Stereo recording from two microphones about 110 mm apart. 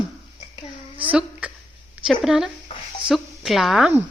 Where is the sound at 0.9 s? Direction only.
10° right (ahead or behind).